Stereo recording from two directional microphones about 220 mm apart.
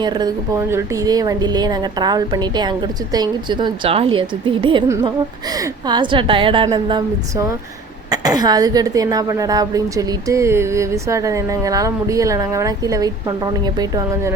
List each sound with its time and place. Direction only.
0.0 s speech: 20° right (ahead or behind)
4.9 s a woman's voice: 15° right (ahead or behind)